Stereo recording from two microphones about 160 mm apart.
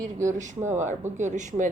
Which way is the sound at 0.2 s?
50° right (ahead or behind).